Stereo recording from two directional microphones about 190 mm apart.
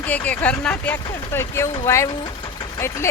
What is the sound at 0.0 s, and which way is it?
Speech, 5° left (ahead or behind).